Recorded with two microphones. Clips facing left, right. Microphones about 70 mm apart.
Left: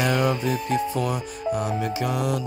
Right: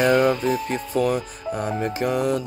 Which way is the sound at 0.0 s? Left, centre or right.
Right.